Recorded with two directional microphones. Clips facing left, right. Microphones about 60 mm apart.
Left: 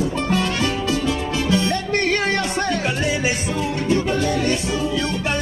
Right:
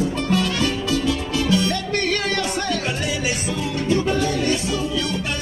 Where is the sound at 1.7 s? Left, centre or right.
Left.